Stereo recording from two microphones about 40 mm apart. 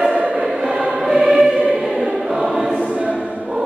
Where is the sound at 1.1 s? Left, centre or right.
Centre.